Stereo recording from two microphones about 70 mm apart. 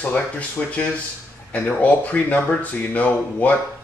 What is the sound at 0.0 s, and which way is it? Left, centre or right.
Speech, centre.